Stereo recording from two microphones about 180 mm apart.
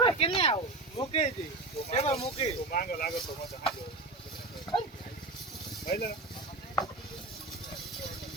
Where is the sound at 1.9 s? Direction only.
35° left (ahead or behind).